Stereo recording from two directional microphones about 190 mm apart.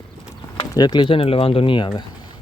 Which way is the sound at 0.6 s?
20° left (ahead or behind).